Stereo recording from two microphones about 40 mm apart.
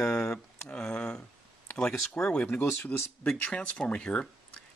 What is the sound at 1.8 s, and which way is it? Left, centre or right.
Speech, centre.